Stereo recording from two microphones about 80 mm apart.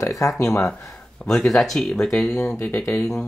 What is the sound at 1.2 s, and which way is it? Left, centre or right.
Speech, centre.